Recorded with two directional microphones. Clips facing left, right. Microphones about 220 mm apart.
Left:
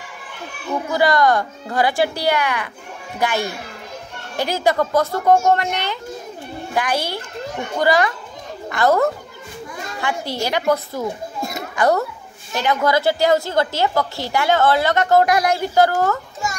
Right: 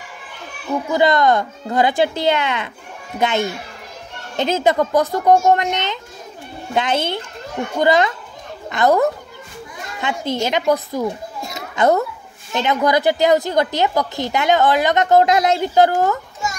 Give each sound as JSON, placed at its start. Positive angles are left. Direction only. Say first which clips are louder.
{"t": 0.9, "sound": "a woman's voice", "louder": "right 1 dB", "side_deg": -20}